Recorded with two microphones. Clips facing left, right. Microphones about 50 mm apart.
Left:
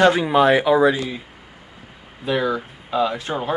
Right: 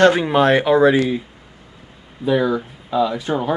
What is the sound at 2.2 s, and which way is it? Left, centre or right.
Speech, left.